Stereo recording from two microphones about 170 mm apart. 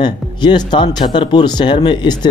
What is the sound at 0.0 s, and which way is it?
Speech, 25° left (ahead or behind).